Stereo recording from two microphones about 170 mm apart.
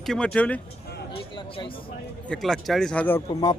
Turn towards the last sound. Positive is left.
turn(degrees=10)  # may be behind; listen again after turning